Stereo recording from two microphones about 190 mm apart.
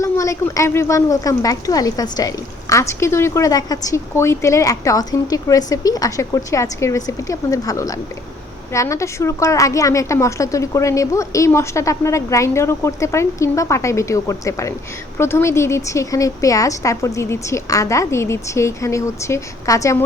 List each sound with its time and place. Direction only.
0.0 s a woman's voice: 15° left (ahead or behind)